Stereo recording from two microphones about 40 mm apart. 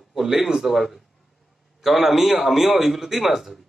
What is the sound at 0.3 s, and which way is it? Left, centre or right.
Speech, centre.